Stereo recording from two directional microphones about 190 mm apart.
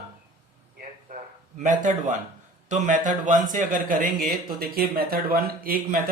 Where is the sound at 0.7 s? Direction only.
45° right (ahead or behind).